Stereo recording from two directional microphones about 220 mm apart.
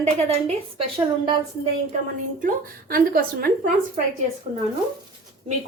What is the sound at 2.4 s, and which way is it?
Speech, 40° right (ahead or behind).